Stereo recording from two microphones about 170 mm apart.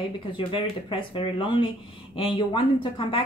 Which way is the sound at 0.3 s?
30° left (ahead or behind).